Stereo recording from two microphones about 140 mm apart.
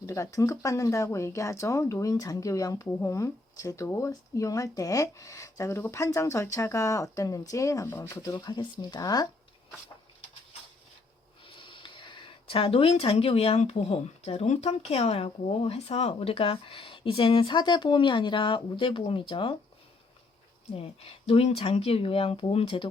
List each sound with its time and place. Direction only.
0.0 s speech: 20° left (ahead or behind)
11.4 s speech: 35° left (ahead or behind)
20.7 s speech: 45° left (ahead or behind)